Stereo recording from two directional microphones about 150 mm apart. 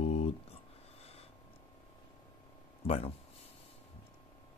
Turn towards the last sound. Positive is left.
turn(degrees=40)  # may be behind; listen again after turning